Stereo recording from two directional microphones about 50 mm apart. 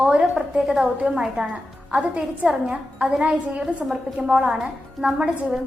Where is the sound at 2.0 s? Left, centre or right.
Right; by 5.5 s centre.